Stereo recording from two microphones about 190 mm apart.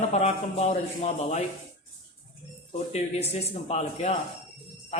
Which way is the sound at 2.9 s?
35° left (ahead or behind).